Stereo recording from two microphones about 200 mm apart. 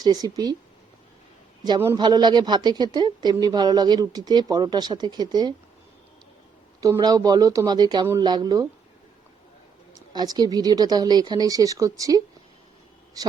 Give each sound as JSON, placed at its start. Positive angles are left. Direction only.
{"t": 0.0, "sound": "speech", "side_deg": -20}
{"t": 1.6, "sound": "a man's voice", "side_deg": -15}
{"t": 6.8, "sound": "speech", "side_deg": -20}
{"t": 10.1, "sound": "speech", "side_deg": -20}